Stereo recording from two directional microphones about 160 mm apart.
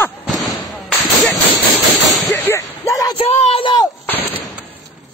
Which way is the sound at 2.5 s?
20° left (ahead or behind).